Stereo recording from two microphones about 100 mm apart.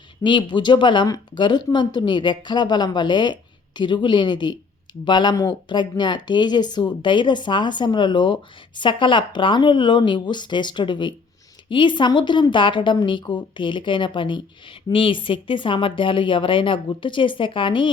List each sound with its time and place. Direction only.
0.2 s a woman's voice: 50° left (ahead or behind)